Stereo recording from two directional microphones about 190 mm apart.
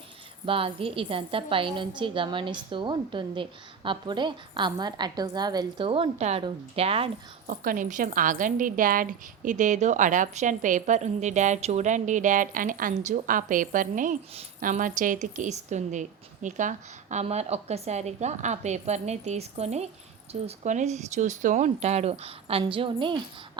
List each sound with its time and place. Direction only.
0.4 s a woman's voice: 30° right (ahead or behind)
7.4 s a woman's voice: 50° right (ahead or behind); by 23.2 s 25° right (ahead or behind)